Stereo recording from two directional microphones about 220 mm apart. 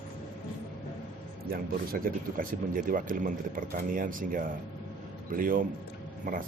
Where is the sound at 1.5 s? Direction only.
40° right (ahead or behind).